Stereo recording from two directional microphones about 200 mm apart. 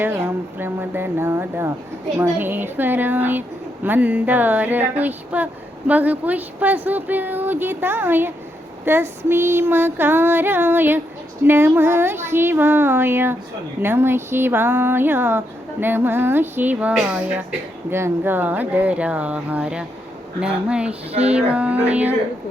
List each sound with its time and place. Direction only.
0.0 s speech: 10° right (ahead or behind)
21.1 s a sound: 30° right (ahead or behind)
21.3 s speech: 5° right (ahead or behind)